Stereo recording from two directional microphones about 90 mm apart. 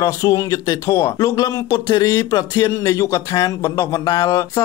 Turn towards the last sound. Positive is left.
turn(degrees=40)  # may be behind; listen again after turning